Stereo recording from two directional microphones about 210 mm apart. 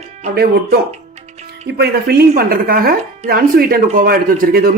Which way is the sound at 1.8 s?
45° right (ahead or behind).